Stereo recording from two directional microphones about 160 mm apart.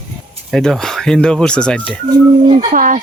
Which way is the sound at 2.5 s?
45° right (ahead or behind).